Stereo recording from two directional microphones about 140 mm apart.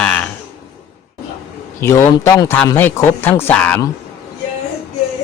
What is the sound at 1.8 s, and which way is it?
A man's voice, 20° left (ahead or behind).